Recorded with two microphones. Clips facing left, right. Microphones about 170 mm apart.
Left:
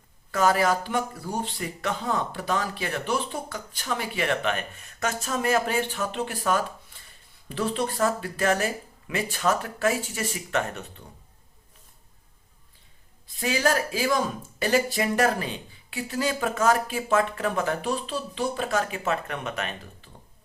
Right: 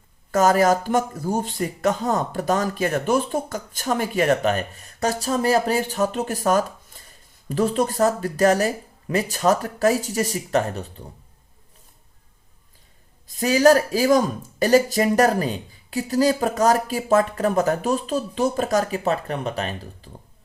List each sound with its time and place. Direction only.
0.3 s speech: 45° right (ahead or behind)
13.2 s speech: 40° right (ahead or behind)